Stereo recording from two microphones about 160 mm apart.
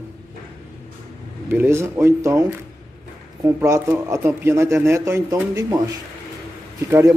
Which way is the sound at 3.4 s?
15° right (ahead or behind).